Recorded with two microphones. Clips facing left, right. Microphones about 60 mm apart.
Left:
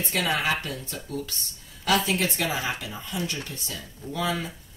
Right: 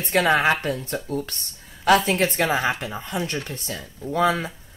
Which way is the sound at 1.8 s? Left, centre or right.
Right.